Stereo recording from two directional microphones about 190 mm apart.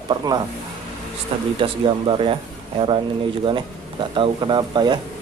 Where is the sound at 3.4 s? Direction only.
25° right (ahead or behind).